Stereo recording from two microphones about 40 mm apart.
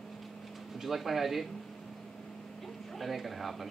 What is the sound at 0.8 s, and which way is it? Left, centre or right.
Speech, centre.